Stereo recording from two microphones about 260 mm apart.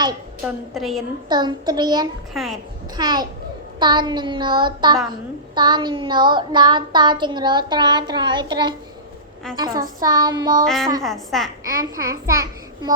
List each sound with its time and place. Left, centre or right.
0.4 s a woman's voice: centre
1.3 s child singing: centre
2.3 s a woman's voice: centre
2.9 s child singing: centre
10.0 s child singing: centre
11.0 s a woman's voice: centre
11.6 s child singing: centre